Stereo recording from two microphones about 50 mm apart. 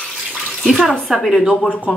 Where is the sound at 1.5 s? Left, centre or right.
Left.